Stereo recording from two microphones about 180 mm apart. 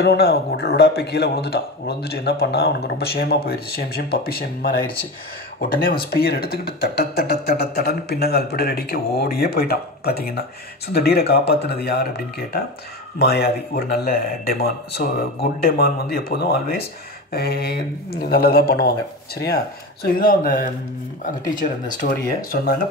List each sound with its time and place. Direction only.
0.0 s speech: 65° left (ahead or behind)
5.9 s speech: 55° left (ahead or behind)